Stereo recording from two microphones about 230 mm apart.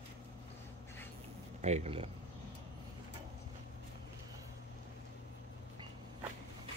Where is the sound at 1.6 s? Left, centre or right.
Right.